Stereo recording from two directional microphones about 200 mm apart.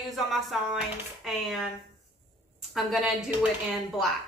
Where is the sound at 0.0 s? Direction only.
Centre (ahead or behind).